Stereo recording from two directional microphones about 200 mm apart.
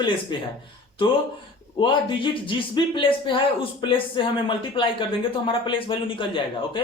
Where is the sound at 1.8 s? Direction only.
25° left (ahead or behind).